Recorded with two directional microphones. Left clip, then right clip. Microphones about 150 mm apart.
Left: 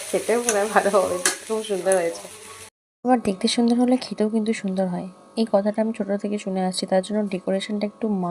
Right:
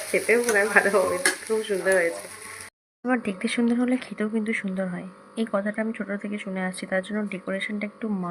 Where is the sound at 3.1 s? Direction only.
30° left (ahead or behind).